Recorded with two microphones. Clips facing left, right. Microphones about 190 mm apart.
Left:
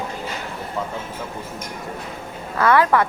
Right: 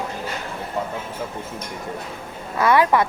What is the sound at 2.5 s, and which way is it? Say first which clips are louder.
Speech: even; 15° right (ahead or behind).